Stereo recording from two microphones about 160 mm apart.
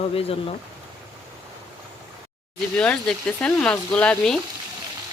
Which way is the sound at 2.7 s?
5° left (ahead or behind).